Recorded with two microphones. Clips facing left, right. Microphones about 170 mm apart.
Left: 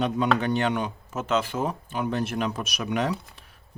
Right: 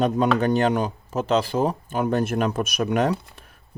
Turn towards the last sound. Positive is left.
turn(degrees=-50)  # may be behind; listen again after turning